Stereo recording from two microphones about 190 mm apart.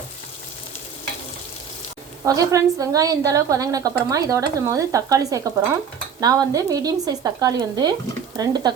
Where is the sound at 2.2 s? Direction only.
20° right (ahead or behind).